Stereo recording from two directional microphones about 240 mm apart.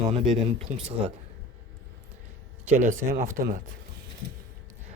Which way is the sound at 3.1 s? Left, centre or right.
Right.